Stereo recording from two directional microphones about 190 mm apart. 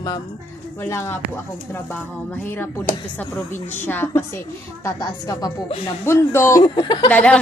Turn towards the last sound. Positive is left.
turn(degrees=5)  # may be behind; listen again after turning